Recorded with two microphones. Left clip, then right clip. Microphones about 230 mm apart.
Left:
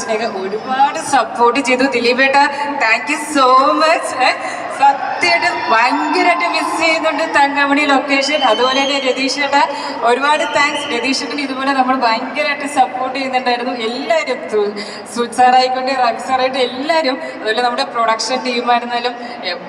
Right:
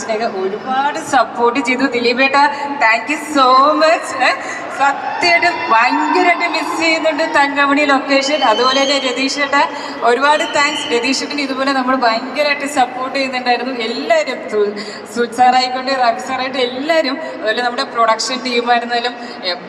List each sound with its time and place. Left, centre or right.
0.7 s a woman's voice: centre